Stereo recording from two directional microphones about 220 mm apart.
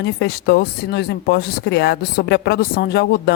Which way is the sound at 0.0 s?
50° left (ahead or behind).